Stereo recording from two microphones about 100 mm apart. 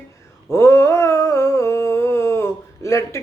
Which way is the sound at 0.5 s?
25° left (ahead or behind).